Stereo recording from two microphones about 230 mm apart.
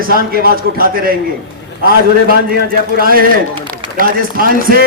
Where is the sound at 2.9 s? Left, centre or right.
Right.